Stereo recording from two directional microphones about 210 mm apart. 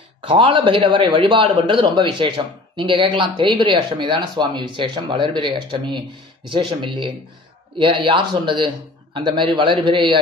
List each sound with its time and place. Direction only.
0.2 s a man's voice: 25° right (ahead or behind)